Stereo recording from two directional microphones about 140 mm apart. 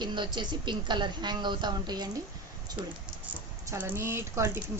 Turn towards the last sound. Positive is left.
turn(degrees=-20)  # may be behind; listen again after turning